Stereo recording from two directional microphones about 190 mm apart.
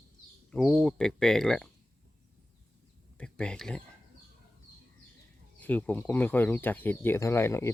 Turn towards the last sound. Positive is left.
turn(degrees=15)  # may be behind; listen again after turning